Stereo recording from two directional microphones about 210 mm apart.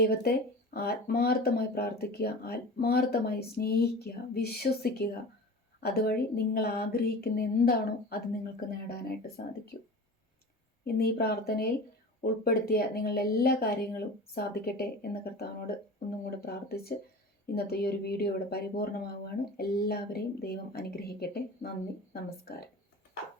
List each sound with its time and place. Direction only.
0.0 s speech: 50° left (ahead or behind)
10.8 s speech: 45° left (ahead or behind)